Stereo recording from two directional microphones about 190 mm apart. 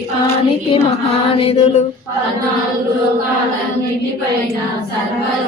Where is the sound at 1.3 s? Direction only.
35° left (ahead or behind).